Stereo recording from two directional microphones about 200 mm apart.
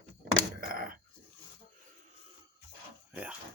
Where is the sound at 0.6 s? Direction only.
45° right (ahead or behind).